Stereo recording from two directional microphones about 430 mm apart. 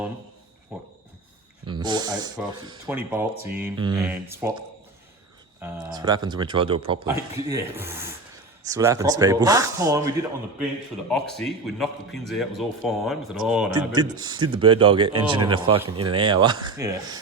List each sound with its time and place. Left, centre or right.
1.6 s a man's voice: centre
11.1 s a man's voice: centre